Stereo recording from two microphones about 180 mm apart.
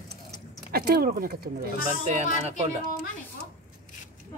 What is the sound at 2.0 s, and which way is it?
Speech, 40° right (ahead or behind).